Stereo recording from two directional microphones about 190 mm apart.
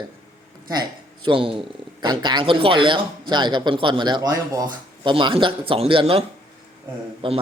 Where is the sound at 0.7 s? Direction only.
25° right (ahead or behind).